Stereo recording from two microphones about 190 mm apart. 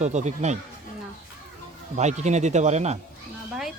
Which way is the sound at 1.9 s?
40° right (ahead or behind).